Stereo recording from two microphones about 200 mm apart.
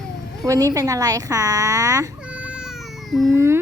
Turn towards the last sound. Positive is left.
turn(degrees=-15)  # may be behind; listen again after turning